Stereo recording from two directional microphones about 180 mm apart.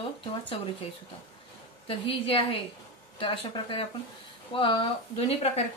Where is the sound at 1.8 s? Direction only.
30° left (ahead or behind).